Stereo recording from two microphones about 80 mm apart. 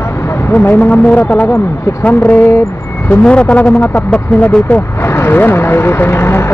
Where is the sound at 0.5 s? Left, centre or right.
Left.